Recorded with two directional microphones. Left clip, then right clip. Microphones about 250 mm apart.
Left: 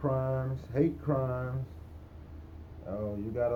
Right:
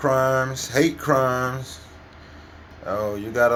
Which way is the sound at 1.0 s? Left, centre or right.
Centre.